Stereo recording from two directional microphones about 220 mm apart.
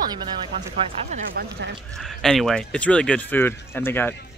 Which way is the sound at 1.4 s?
45° right (ahead or behind).